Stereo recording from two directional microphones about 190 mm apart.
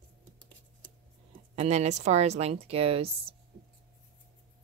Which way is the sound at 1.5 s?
35° right (ahead or behind).